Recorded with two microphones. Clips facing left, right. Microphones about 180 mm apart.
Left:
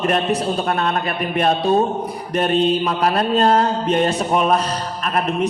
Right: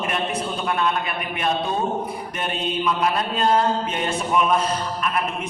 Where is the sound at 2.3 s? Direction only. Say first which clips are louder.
Left 11 dB; 40° left (ahead or behind).